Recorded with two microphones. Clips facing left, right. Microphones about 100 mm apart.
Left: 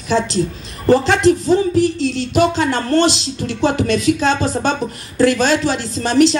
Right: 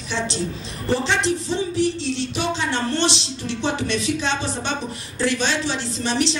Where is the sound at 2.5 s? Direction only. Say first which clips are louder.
Left 6 dB; 40° left (ahead or behind).